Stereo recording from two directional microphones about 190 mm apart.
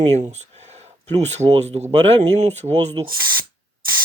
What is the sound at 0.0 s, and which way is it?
Speech, 35° right (ahead or behind).